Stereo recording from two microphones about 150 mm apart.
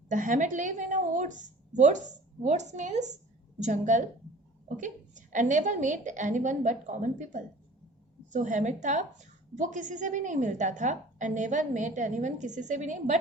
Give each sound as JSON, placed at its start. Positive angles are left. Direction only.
{"t": 0.1, "sound": "a woman's voice", "side_deg": -55}